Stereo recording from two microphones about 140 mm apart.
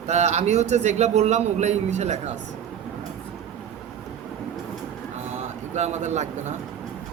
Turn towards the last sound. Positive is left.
turn(degrees=-55)  # may be behind; listen again after turning